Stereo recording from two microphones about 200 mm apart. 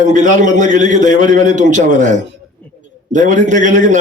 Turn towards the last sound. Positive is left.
turn(degrees=-40)  # may be behind; listen again after turning